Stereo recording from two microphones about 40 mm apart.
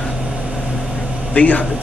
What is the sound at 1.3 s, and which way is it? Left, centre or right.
Speech, left.